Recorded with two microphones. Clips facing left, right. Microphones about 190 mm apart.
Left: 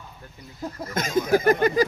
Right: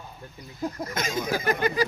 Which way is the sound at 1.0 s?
50° left (ahead or behind).